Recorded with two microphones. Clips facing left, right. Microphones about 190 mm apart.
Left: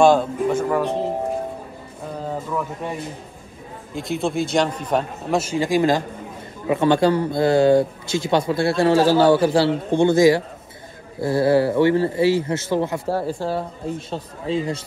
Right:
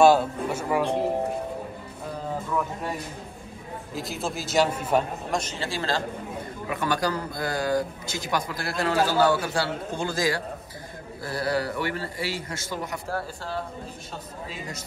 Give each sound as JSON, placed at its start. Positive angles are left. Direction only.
{"t": 0.0, "sound": "speech", "side_deg": -5}
{"t": 2.5, "sound": "a man's voice", "side_deg": -5}
{"t": 5.4, "sound": "speech", "side_deg": 10}